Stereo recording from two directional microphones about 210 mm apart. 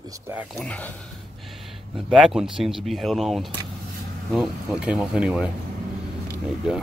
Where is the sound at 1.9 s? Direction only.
Centre (ahead or behind).